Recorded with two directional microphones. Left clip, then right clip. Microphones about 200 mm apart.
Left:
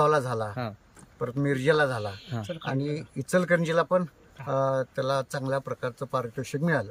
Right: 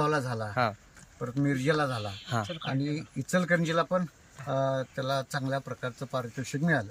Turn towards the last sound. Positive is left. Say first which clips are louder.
# left 2 dB
turn(degrees=15)  # may be behind; listen again after turning